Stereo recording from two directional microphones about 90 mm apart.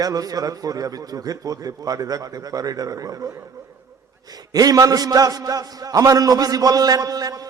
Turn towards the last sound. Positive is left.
turn(degrees=-45)  # may be behind; listen again after turning